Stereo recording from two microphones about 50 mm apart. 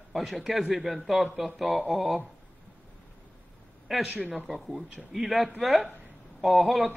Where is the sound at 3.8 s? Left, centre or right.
Centre.